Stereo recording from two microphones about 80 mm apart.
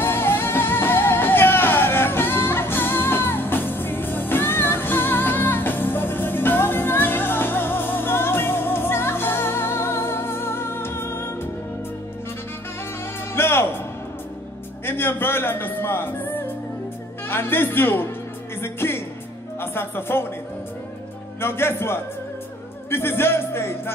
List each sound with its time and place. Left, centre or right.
0.0 s music: left
13.3 s music: left
14.9 s music: left
21.4 s a man's voice: left
22.8 s music: left